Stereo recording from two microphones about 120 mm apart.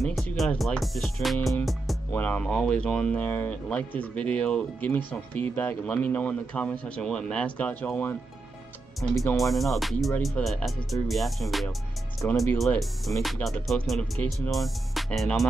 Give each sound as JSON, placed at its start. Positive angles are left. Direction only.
{"t": 0.0, "sound": "speech", "side_deg": 0}
{"t": 2.1, "sound": "speech", "side_deg": 15}
{"t": 9.4, "sound": "speech", "side_deg": 0}
{"t": 12.2, "sound": "speech", "side_deg": 15}
{"t": 12.7, "sound": "speech", "side_deg": 0}